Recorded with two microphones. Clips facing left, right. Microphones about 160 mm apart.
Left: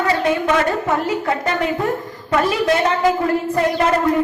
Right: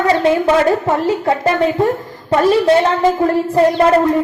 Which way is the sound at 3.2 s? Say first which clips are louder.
Right 5 dB; 30° right (ahead or behind).